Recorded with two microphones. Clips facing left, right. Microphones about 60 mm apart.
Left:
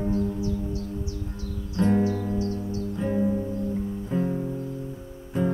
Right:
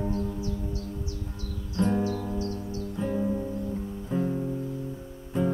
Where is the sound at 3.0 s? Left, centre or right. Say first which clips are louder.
Left 3 dB; centre.